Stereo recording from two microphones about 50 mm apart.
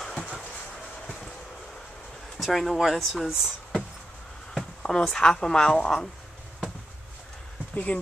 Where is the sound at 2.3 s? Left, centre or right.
Centre.